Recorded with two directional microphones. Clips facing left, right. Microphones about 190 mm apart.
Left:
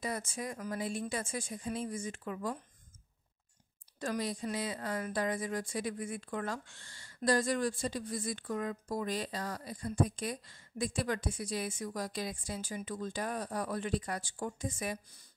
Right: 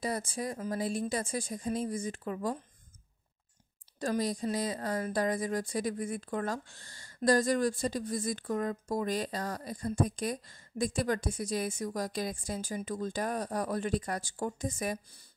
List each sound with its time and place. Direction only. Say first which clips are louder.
0.0 s a woman's voice: right 4 dB; 35° right (ahead or behind)
4.0 s a woman's voice: right 4 dB; 35° right (ahead or behind)